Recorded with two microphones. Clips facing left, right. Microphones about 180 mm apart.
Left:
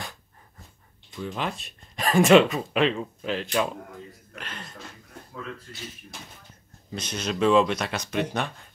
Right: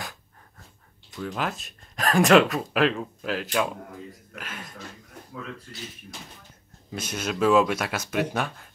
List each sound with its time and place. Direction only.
1.1 s speech: centre (ahead or behind)
6.9 s speech: 5° right (ahead or behind)